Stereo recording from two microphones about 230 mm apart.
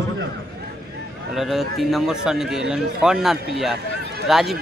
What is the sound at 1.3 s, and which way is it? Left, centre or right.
A man's voice, centre.